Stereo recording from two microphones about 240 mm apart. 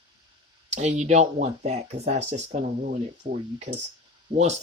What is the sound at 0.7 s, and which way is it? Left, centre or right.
Speech, right.